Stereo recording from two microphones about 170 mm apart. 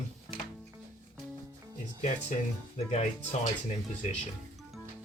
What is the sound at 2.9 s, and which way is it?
Speech, 40° left (ahead or behind).